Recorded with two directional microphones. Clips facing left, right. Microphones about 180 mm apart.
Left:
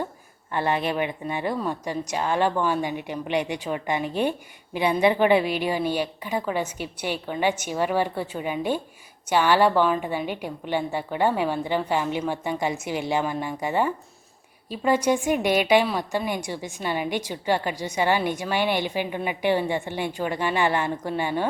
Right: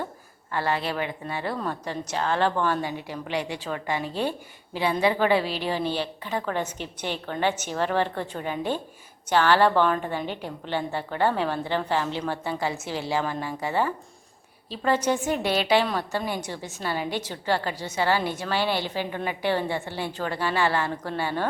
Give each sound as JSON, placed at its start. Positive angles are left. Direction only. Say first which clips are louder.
{"t": 0.5, "sound": "a woman's voice", "louder": "left 2 dB", "side_deg": 20}